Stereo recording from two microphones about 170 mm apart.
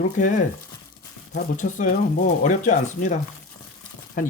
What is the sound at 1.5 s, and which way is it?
Speech, 50° left (ahead or behind).